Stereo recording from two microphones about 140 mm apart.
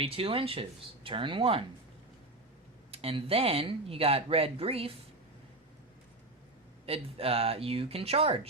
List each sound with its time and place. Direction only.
0.0 s speech: 40° right (ahead or behind)
2.9 s speech: 45° right (ahead or behind)
6.8 s speech: 45° right (ahead or behind)